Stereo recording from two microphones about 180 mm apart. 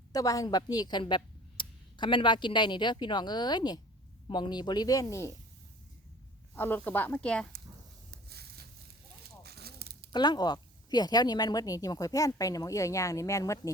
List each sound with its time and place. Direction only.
0.1 s a woman's voice: 20° left (ahead or behind)
6.6 s speech: 10° left (ahead or behind)
8.3 s a sound: 60° right (ahead or behind)
10.1 s a woman's voice: 25° left (ahead or behind)